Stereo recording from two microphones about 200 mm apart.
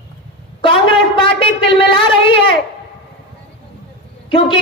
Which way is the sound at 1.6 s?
25° left (ahead or behind).